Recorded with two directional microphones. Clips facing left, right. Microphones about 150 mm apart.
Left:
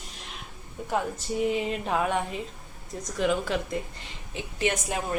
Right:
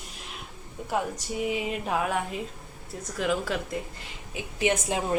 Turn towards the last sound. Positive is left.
turn(degrees=-25)  # may be behind; listen again after turning